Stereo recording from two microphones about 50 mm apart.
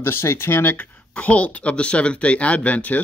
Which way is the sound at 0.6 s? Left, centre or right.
Left.